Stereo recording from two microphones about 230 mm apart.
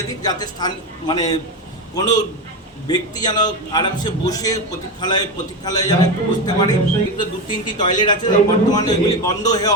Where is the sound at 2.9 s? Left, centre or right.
Centre.